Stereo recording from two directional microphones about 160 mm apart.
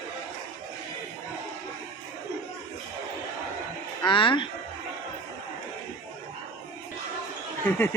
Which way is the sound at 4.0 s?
30° left (ahead or behind).